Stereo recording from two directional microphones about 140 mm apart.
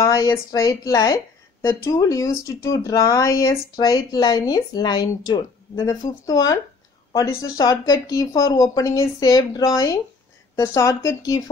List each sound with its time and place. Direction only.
0.0 s speech: 20° left (ahead or behind)